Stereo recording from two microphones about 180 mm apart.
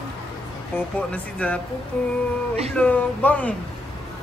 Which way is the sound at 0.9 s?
5° left (ahead or behind).